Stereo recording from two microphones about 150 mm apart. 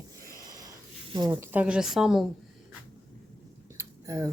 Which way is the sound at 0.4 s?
25° right (ahead or behind).